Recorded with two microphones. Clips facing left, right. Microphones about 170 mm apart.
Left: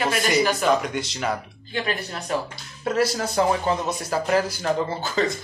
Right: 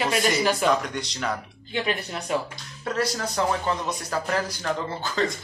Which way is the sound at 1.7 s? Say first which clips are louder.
Even; 20° right (ahead or behind).